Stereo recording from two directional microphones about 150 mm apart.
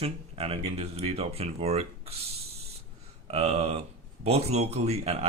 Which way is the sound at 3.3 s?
45° right (ahead or behind).